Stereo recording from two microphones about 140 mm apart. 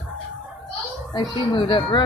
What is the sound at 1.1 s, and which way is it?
Speech, 35° left (ahead or behind).